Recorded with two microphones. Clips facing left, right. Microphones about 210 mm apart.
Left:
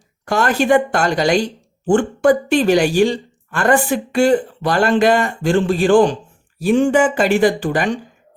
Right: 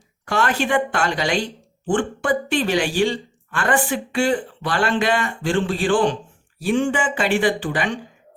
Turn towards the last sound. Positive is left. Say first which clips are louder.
# left 4 dB
turn(degrees=45)  # may be behind; listen again after turning